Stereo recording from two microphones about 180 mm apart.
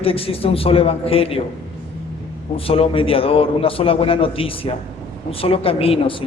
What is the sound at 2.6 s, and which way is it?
A man's voice, 30° left (ahead or behind).